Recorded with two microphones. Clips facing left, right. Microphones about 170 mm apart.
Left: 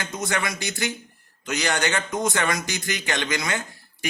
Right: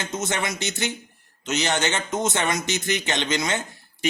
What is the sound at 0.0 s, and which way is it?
A man's voice, 25° right (ahead or behind).